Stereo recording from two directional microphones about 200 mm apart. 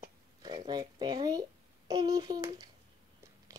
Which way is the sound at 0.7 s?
20° right (ahead or behind).